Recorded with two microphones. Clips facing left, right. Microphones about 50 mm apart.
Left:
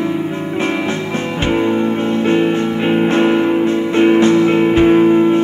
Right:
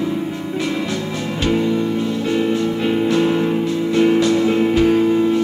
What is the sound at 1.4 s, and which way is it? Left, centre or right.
Music, left.